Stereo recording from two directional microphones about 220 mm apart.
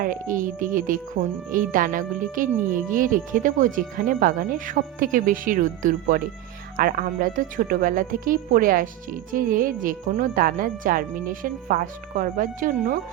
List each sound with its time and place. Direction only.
0.0 s speech: 40° right (ahead or behind)